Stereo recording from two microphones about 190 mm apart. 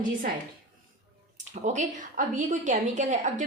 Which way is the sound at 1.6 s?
40° right (ahead or behind).